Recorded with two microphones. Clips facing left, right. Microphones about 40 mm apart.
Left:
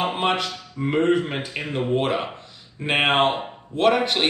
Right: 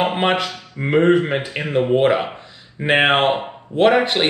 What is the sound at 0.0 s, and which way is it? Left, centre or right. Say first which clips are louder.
Speech: right 4 dB; right.